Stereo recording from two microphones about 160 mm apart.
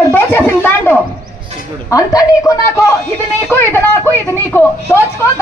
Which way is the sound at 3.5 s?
15° left (ahead or behind).